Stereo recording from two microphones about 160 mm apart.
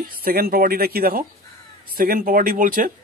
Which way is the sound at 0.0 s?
70° right (ahead or behind).